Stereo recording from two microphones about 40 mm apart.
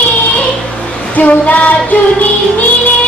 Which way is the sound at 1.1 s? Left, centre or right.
Left.